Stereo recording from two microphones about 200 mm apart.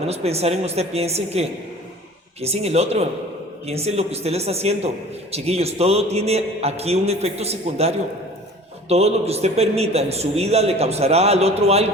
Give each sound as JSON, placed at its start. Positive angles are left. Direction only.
{"t": 0.1, "sound": "a man's voice", "side_deg": -30}